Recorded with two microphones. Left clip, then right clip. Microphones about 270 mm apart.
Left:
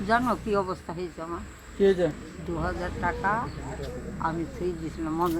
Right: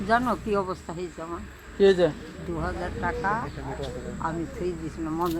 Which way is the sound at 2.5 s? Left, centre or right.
Centre.